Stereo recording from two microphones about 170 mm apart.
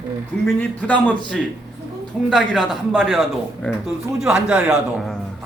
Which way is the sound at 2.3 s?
Centre (ahead or behind).